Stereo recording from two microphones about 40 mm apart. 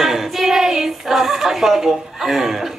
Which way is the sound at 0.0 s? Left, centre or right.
Centre.